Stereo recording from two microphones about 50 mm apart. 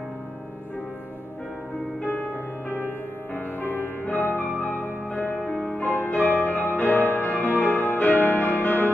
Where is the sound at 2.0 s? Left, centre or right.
Left.